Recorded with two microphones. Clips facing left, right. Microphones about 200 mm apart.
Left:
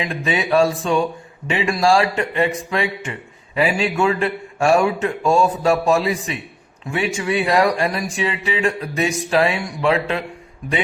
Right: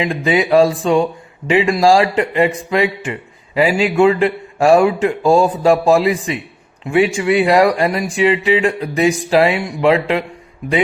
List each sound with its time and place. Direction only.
0.0 s speech: 30° right (ahead or behind)